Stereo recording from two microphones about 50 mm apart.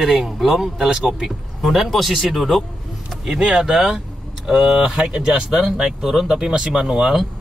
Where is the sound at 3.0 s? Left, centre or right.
Centre.